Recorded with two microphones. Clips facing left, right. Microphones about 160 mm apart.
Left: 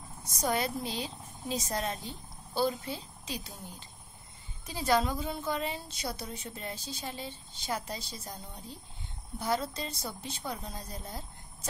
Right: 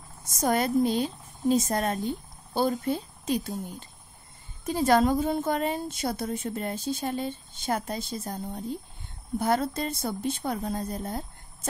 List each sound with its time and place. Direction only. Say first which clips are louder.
0.2 s a woman's voice: right 5 dB; 50° right (ahead or behind)